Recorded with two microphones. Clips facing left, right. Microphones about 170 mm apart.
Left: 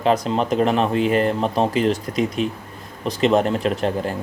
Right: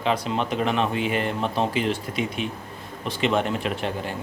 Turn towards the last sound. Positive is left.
turn(degrees=40)  # may be behind; listen again after turning